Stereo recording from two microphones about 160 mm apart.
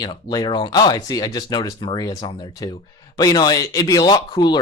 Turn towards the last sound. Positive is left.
turn(degrees=25)  # may be behind; listen again after turning